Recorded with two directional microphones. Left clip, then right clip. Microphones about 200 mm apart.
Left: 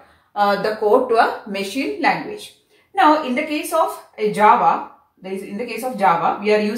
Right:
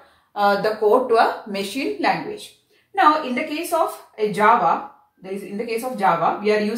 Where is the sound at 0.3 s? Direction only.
20° right (ahead or behind).